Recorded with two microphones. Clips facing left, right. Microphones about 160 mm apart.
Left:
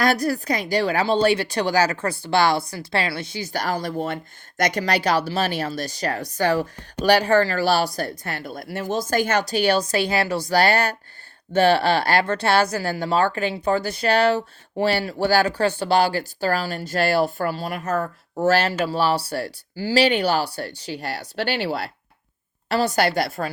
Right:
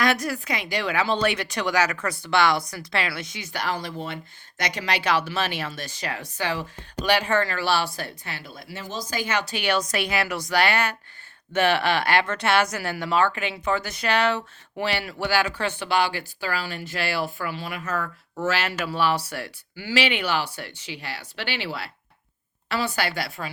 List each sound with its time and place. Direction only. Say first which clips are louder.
0.0 s a woman's voice: left 3 dB; 35° left (ahead or behind)